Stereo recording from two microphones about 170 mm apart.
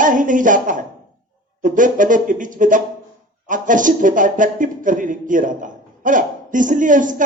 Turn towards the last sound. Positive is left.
turn(degrees=-50)  # may be behind; listen again after turning